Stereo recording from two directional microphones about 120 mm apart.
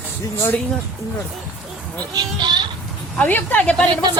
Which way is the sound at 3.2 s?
15° left (ahead or behind).